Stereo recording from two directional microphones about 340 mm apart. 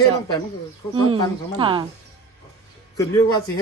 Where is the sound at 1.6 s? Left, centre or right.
Centre.